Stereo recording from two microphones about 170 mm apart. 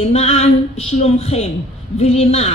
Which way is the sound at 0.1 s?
40° left (ahead or behind).